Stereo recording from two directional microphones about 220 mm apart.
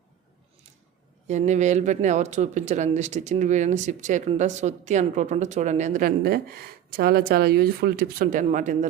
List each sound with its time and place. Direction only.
1.3 s a man's voice: 30° right (ahead or behind)